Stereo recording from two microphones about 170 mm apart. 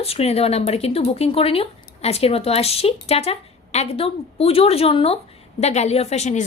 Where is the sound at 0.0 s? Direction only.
35° left (ahead or behind).